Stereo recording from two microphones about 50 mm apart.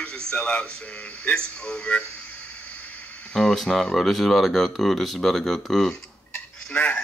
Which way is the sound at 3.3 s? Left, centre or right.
Centre.